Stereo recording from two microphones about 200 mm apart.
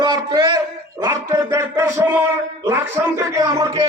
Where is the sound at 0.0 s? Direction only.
20° right (ahead or behind).